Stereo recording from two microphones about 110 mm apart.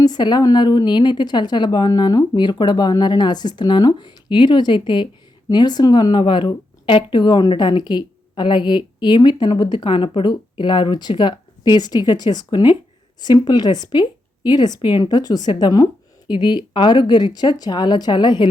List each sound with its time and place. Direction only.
0.0 s a woman's voice: 40° left (ahead or behind)